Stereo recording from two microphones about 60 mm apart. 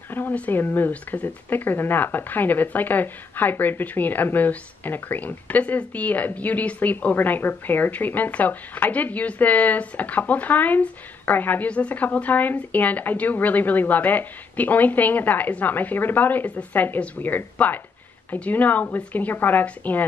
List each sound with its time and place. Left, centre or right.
0.1 s speech: left